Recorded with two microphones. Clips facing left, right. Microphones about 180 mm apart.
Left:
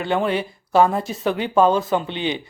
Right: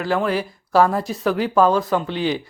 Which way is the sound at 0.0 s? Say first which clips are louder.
Even; centre (ahead or behind).